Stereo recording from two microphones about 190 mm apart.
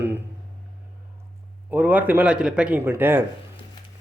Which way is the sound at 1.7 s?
10° right (ahead or behind).